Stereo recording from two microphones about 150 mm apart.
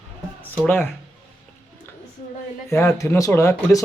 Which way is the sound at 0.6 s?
10° left (ahead or behind).